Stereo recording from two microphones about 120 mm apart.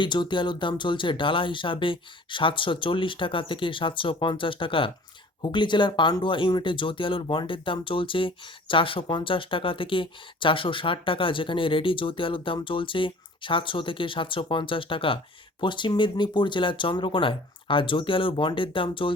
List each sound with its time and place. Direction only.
0.0 s speech: 40° left (ahead or behind)